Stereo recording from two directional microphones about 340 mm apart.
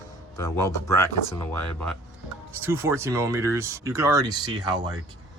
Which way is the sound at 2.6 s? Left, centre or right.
Centre.